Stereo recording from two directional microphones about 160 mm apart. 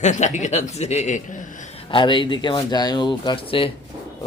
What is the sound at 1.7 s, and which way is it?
Speech, 30° left (ahead or behind).